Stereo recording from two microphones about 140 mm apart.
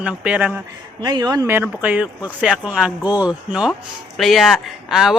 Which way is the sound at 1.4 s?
15° right (ahead or behind).